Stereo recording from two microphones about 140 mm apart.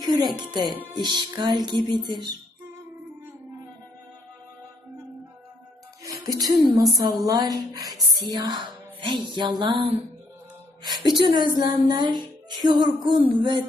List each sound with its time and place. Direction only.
0.0 s music: 30° right (ahead or behind)
0.3 s speech: 30° right (ahead or behind)
6.1 s music: 25° right (ahead or behind)
6.7 s a woman's voice: 25° right (ahead or behind)
11.9 s music: 30° right (ahead or behind)
12.6 s speech: 30° right (ahead or behind)